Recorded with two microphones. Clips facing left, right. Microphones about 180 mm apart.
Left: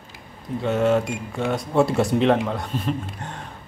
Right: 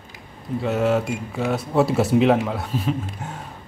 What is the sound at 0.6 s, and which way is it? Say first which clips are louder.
Speech: left 1 dB; centre (ahead or behind).